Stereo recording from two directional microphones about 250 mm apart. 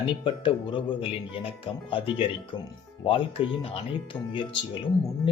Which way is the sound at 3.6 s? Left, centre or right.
Left.